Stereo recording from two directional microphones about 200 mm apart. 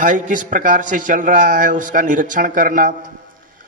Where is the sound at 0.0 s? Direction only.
40° right (ahead or behind).